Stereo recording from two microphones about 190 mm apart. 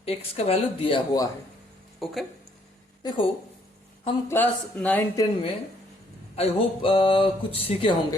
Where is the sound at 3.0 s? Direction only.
25° left (ahead or behind).